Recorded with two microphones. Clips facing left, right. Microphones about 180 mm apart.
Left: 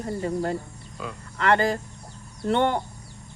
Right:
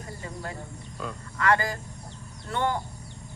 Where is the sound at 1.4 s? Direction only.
30° left (ahead or behind).